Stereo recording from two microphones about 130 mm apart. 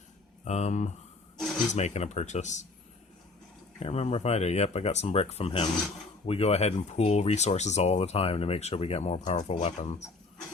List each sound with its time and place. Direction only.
0.4 s speech: 60° left (ahead or behind)
1.4 s a sound: 5° left (ahead or behind)
1.7 s speech: 60° left (ahead or behind)
3.8 s speech: 55° left (ahead or behind)